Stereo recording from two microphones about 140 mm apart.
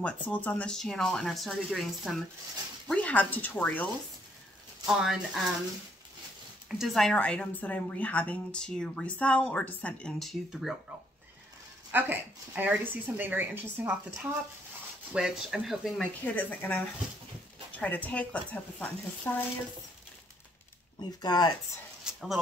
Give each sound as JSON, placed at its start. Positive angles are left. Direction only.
{"t": 0.0, "sound": "speech", "side_deg": 10}
{"t": 2.9, "sound": "a woman's voice", "side_deg": 10}
{"t": 4.8, "sound": "speech", "side_deg": -5}
{"t": 6.8, "sound": "a woman's voice", "side_deg": 0}
{"t": 11.9, "sound": "a woman's voice", "side_deg": -15}
{"t": 16.0, "sound": "a woman's voice", "side_deg": 10}
{"t": 21.2, "sound": "speech", "side_deg": 30}
{"t": 22.0, "sound": "a sound", "side_deg": 0}